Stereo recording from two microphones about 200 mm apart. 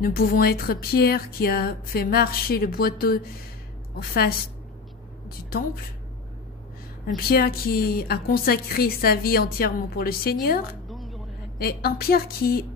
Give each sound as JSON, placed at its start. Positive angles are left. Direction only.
{"t": 0.0, "sound": "a woman's voice", "side_deg": 50}
{"t": 7.2, "sound": "a woman's voice", "side_deg": 50}
{"t": 10.9, "sound": "a sound", "side_deg": 0}
{"t": 11.5, "sound": "a woman's voice", "side_deg": 50}